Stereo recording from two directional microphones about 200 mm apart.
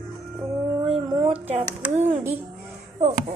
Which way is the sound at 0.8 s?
30° right (ahead or behind).